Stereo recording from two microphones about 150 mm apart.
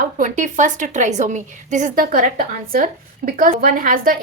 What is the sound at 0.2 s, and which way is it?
A woman's voice, 55° right (ahead or behind).